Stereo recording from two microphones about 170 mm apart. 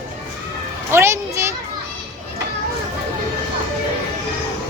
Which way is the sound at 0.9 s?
15° right (ahead or behind).